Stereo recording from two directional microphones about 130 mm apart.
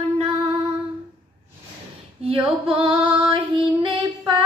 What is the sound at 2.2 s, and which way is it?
Female singing, 45° right (ahead or behind).